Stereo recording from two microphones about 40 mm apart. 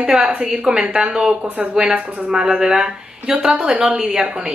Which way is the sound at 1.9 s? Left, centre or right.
Right.